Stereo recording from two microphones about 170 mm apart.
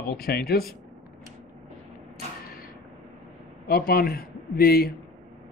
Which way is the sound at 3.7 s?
60° left (ahead or behind).